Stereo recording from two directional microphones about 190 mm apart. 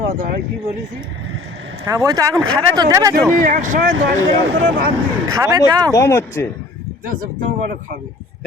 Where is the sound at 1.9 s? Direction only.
20° right (ahead or behind).